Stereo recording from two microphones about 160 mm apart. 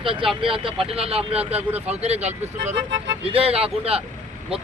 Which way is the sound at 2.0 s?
40° right (ahead or behind).